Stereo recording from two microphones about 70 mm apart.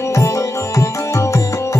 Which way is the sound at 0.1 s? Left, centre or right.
Left.